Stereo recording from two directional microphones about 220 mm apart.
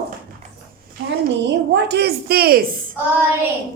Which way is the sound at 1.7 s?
50° right (ahead or behind).